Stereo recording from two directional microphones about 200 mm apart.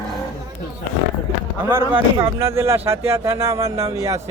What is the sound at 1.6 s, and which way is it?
Speech, 10° right (ahead or behind).